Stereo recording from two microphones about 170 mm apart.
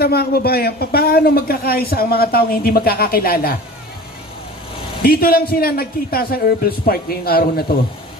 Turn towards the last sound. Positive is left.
turn(degrees=60)  # may be behind; listen again after turning